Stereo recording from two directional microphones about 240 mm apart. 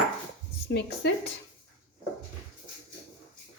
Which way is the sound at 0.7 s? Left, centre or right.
Left.